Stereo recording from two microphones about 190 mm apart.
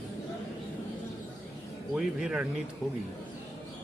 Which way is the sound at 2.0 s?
5° right (ahead or behind).